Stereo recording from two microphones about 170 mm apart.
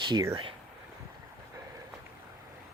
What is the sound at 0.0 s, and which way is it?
Speech, 25° right (ahead or behind).